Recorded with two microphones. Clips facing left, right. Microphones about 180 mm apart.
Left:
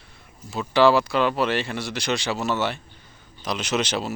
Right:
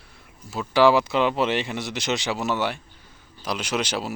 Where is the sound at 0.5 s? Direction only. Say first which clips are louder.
Even; 10° right (ahead or behind).